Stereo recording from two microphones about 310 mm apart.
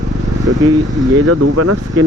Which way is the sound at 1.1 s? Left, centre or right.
Right.